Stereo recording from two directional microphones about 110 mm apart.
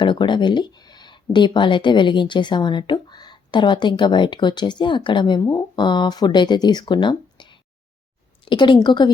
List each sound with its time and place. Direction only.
0.0 s speech: 45° left (ahead or behind)